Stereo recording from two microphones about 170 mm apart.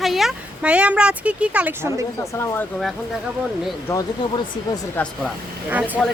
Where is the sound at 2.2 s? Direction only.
15° left (ahead or behind).